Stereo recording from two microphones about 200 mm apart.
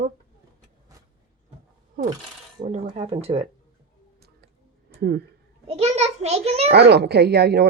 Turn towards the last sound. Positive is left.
turn(degrees=-55)  # may be behind; listen again after turning